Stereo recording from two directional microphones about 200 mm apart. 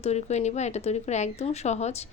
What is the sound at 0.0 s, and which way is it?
Speech, 35° left (ahead or behind).